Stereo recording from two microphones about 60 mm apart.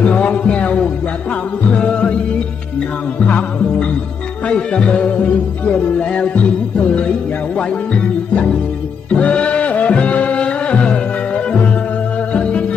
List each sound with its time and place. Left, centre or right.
0.0 s music: left
3.3 s music: centre
12.3 s music: centre